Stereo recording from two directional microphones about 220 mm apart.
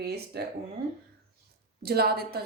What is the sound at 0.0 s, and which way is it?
Speech, 45° right (ahead or behind).